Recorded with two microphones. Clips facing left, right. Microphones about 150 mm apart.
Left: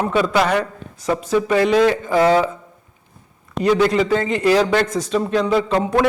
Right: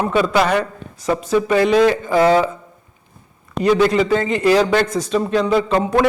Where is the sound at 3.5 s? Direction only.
15° right (ahead or behind).